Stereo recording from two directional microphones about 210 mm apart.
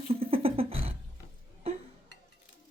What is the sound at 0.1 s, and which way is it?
Beatboxing, 25° right (ahead or behind).